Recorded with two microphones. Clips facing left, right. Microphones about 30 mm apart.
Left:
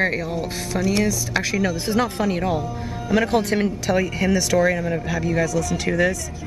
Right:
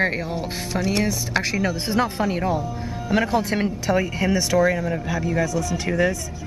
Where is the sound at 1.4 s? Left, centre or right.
Centre.